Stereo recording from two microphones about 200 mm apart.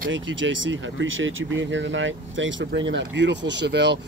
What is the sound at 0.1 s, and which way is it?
Speech, 70° right (ahead or behind).